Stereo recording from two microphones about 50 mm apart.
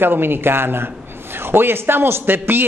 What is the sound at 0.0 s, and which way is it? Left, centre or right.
A man's voice, right.